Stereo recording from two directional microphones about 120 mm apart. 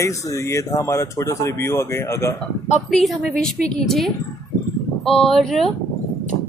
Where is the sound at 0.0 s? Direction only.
25° left (ahead or behind).